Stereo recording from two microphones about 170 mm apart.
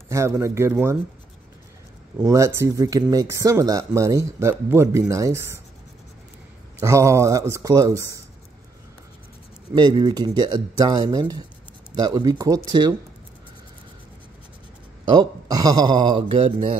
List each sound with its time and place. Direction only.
0.4 s speech: 15° right (ahead or behind)
2.1 s speech: 20° right (ahead or behind)
6.8 s speech: 15° right (ahead or behind)
9.8 s speech: 25° right (ahead or behind)
15.0 s speech: 25° right (ahead or behind)